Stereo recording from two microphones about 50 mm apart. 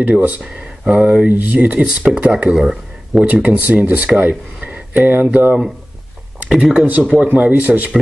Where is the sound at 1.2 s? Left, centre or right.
Right.